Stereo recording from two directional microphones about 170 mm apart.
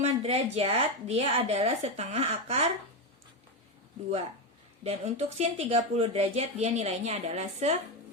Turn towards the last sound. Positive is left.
turn(degrees=-40)  # may be behind; listen again after turning